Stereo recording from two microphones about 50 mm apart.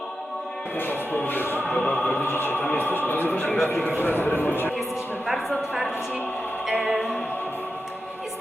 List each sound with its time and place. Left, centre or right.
0.8 s music: left
1.8 s music: centre
2.2 s a man's voice: left
3.3 s speech: left
3.9 s a man's voice: left
5.2 s a sound: centre
6.7 s opera: centre